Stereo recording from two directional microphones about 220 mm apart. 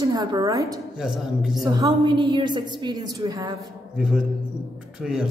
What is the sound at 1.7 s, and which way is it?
A woman's voice, 15° right (ahead or behind).